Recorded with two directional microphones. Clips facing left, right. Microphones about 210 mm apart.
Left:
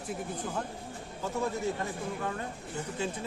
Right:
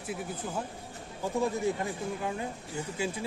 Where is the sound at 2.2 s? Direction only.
15° right (ahead or behind).